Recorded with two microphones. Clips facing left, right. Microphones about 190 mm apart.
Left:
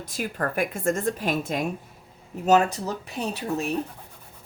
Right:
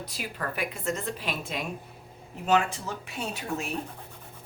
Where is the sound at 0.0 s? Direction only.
45° left (ahead or behind).